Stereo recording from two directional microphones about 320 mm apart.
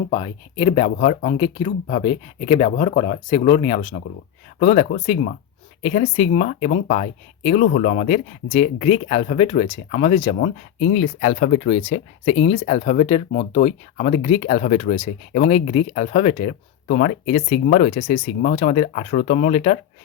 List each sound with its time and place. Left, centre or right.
0.1 s speech: centre